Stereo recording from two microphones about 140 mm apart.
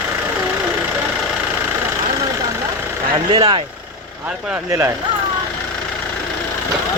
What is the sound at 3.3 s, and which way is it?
Speech, 35° right (ahead or behind).